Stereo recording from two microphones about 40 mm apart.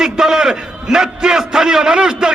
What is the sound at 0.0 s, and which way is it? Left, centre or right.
A man's voice, centre.